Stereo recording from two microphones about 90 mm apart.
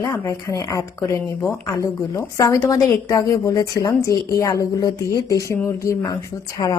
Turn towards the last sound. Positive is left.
turn(degrees=65)  # may be behind; listen again after turning